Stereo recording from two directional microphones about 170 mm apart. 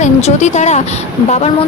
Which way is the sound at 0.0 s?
40° left (ahead or behind).